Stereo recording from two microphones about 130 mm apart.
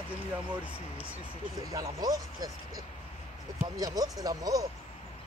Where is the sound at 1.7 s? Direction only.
30° right (ahead or behind).